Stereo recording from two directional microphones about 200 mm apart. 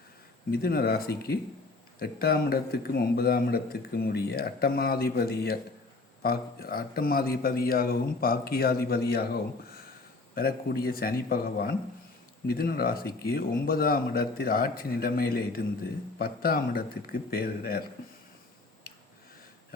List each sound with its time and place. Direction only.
0.5 s a man's voice: 50° left (ahead or behind)